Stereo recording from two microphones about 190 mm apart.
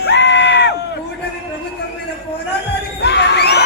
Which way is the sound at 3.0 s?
65° left (ahead or behind).